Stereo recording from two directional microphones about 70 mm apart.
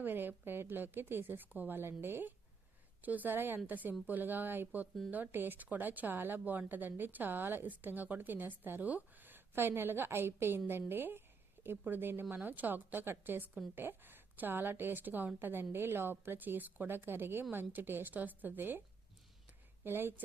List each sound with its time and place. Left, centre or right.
0.0 s a woman's voice: right
19.8 s a woman's voice: right